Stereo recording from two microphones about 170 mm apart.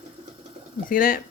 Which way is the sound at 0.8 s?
55° left (ahead or behind).